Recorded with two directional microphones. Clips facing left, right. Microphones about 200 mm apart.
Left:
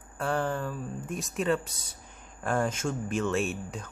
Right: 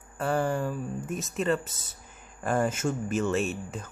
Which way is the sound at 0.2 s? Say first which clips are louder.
Right 2 dB; 5° right (ahead or behind).